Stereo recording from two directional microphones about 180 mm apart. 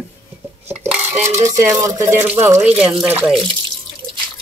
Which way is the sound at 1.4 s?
15° right (ahead or behind).